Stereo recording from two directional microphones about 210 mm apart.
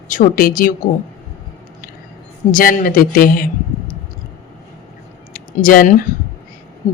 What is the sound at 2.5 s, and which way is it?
Speech, 40° left (ahead or behind).